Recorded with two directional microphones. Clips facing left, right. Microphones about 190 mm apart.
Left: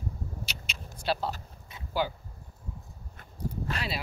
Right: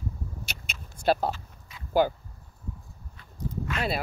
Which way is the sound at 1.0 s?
50° right (ahead or behind).